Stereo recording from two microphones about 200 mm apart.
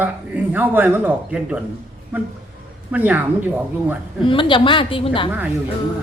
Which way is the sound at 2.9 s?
10° right (ahead or behind).